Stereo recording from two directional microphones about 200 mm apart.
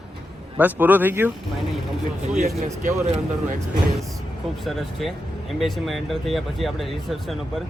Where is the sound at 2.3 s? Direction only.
40° right (ahead or behind).